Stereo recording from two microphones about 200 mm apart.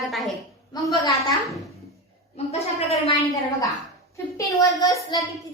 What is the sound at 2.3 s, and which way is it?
Speech, 30° left (ahead or behind).